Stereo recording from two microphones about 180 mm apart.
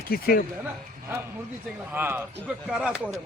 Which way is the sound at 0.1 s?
55° left (ahead or behind).